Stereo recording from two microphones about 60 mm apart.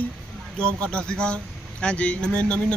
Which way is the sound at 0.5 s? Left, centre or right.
Centre.